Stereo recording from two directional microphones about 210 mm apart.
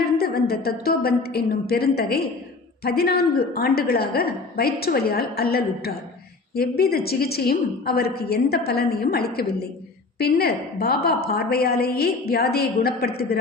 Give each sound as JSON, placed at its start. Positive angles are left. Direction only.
{"t": 0.2, "sound": "a woman's voice", "side_deg": 45}